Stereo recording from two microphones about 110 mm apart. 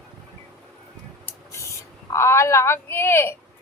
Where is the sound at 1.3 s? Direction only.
25° left (ahead or behind).